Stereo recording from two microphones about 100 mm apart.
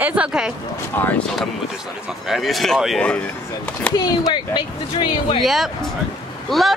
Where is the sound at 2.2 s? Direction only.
Centre (ahead or behind).